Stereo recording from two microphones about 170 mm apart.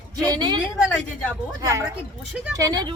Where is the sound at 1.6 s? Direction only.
20° right (ahead or behind).